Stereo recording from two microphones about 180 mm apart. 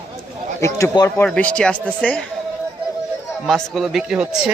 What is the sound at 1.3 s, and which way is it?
Speech, 5° left (ahead or behind).